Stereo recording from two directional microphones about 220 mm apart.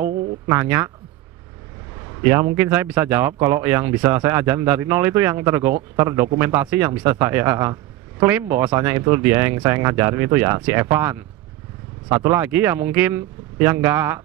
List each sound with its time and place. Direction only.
0.5 s a man's voice: 10° right (ahead or behind)
2.0 s a man's voice: 15° right (ahead or behind)